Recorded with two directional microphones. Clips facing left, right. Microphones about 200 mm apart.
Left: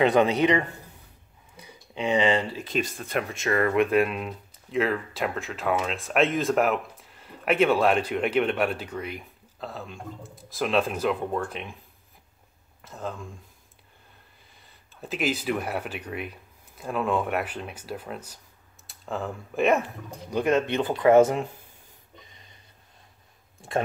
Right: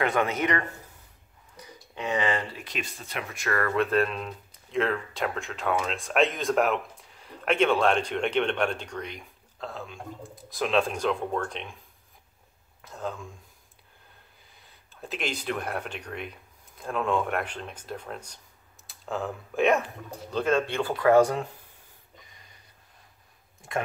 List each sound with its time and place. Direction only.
0.0 s speech: 20° left (ahead or behind)
2.8 s speech: 50° left (ahead or behind)
3.3 s speech: 20° left (ahead or behind); by 11.7 s 5° left (ahead or behind)
12.8 s speech: centre (ahead or behind)
14.5 s speech: centre (ahead or behind)
20.2 s speech: 15° left (ahead or behind)